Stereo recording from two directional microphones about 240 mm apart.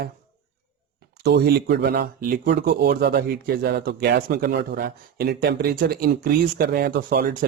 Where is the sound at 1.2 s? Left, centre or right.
Right.